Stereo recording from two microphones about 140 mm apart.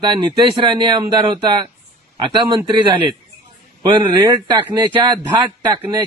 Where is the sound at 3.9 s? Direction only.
35° right (ahead or behind).